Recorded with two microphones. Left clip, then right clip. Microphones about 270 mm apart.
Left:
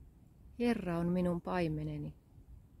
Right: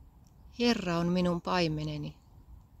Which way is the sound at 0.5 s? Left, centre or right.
Centre.